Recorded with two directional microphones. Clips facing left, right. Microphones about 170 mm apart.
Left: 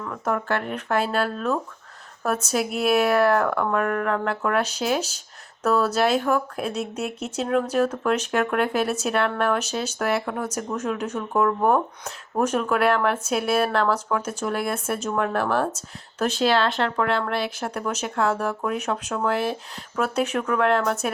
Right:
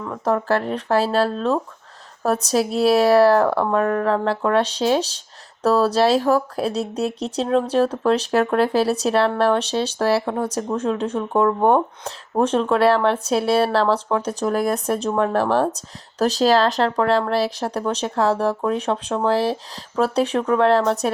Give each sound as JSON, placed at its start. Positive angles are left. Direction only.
{"t": 0.1, "sound": "speech", "side_deg": -35}